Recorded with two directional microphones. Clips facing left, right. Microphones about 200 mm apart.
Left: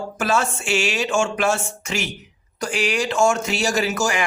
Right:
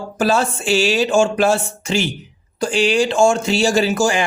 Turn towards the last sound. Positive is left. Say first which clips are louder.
# right 5 dB
turn(degrees=-30)  # may be behind; listen again after turning